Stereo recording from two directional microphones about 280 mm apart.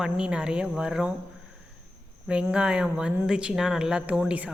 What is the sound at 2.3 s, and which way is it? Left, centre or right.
A woman's voice, centre.